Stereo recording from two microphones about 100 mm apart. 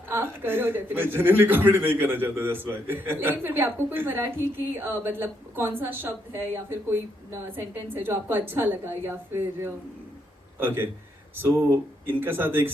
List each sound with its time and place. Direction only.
0.1 s a man's voice: 25° right (ahead or behind)